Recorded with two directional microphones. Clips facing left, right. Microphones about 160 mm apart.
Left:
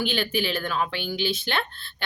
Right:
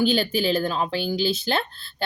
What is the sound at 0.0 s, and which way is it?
Speech, 35° right (ahead or behind).